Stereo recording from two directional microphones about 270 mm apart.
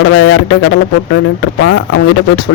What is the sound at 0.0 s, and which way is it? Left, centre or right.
Speech, left.